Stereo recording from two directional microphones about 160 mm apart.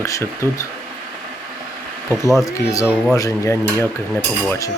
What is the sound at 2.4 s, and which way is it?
Speech, 20° left (ahead or behind).